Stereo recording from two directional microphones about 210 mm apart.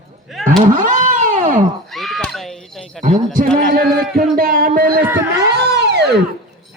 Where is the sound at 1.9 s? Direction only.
Centre (ahead or behind).